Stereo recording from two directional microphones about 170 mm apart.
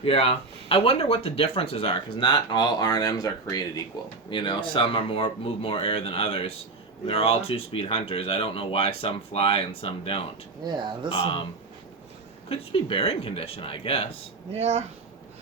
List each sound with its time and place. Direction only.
0.0 s speech: 35° left (ahead or behind)
10.6 s speech: 25° right (ahead or behind)
11.1 s speech: 30° left (ahead or behind)
12.5 s speech: 35° left (ahead or behind)
14.5 s speech: 40° right (ahead or behind)